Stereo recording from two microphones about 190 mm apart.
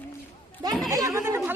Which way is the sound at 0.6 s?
20° right (ahead or behind).